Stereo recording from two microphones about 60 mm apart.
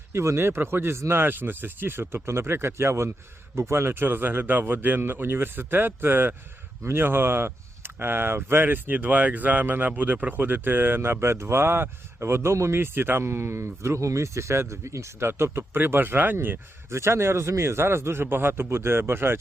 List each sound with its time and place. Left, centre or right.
0.1 s speech: right
15.3 s speech: right
16.9 s speech: right